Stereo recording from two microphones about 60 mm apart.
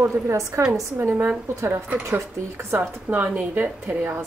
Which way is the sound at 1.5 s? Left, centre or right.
Right.